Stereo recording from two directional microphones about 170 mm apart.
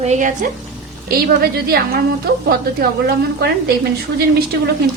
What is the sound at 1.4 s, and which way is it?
A woman's voice, 65° right (ahead or behind).